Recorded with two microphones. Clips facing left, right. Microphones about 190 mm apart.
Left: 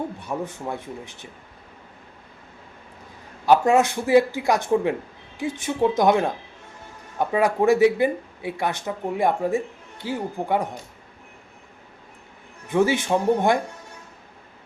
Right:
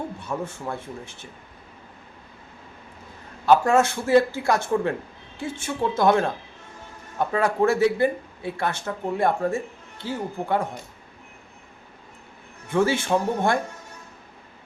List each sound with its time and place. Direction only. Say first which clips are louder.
0.2 s speech: left 1 dB; 15° left (ahead or behind)
3.4 s speech: left 1 dB; 15° left (ahead or behind)
12.6 s speech: left 1 dB; 15° left (ahead or behind)